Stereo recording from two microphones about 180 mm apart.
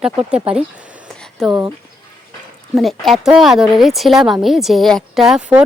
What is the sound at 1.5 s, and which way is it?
Speech, 15° right (ahead or behind).